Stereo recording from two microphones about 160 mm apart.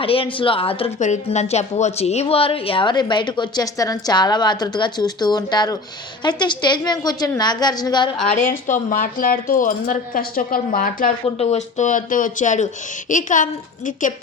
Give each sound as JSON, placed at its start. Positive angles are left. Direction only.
{"t": 0.0, "sound": "speech", "side_deg": 35}
{"t": 0.9, "sound": "a woman's voice", "side_deg": 50}
{"t": 8.4, "sound": "speech", "side_deg": 50}
{"t": 11.3, "sound": "speech", "side_deg": 45}